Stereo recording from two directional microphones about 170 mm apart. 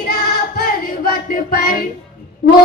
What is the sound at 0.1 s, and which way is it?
Singing, 60° left (ahead or behind).